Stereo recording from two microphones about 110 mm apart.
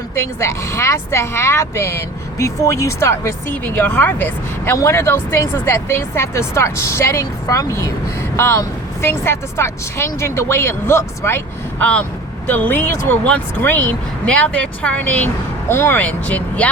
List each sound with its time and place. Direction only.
0.2 s speech: 25° left (ahead or behind)